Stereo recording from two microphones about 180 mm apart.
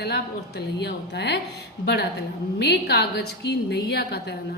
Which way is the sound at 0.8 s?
70° left (ahead or behind).